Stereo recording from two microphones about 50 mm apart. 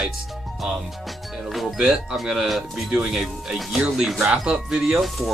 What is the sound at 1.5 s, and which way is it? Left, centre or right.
Speech, centre.